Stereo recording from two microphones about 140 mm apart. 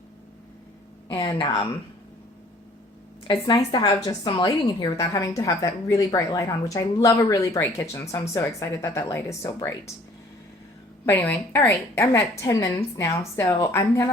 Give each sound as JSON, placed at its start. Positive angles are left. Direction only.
{"t": 1.0, "sound": "a sound", "side_deg": 40}
{"t": 3.2, "sound": "a woman's voice", "side_deg": 35}
{"t": 11.0, "sound": "a woman's voice", "side_deg": 15}